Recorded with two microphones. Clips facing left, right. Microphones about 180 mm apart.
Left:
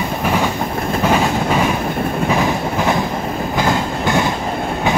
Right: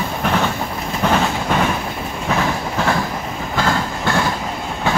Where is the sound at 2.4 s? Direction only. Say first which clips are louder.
Left 3 dB; 20° left (ahead or behind).